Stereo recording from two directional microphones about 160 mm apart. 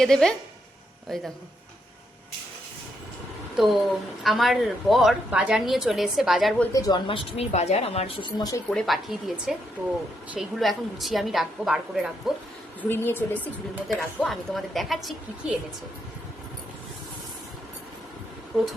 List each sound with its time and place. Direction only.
0.0 s a woman's voice: 5° left (ahead or behind)
3.6 s a woman's voice: centre (ahead or behind)
6.7 s speech: 25° left (ahead or behind)
7.3 s speech: 40° left (ahead or behind); by 8.6 s 25° left (ahead or behind)
8.7 s a woman's voice: centre (ahead or behind)
12.8 s speech: 15° left (ahead or behind)
13.8 s a woman's voice: centre (ahead or behind)
18.5 s a woman's voice: centre (ahead or behind)